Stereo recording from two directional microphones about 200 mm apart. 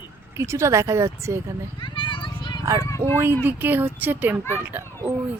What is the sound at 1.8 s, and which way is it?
Children playing, 25° left (ahead or behind).